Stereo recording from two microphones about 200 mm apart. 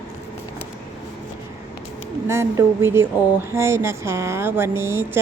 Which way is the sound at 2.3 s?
15° right (ahead or behind).